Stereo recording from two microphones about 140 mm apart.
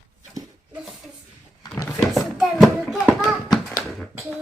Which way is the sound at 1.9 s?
Centre (ahead or behind).